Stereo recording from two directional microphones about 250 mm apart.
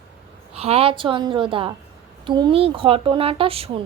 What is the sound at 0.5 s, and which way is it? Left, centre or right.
Speech, right.